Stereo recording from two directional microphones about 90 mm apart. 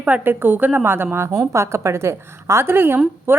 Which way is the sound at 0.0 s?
20° right (ahead or behind).